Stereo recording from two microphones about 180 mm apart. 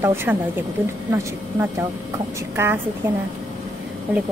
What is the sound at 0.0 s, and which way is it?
Speech, 10° right (ahead or behind).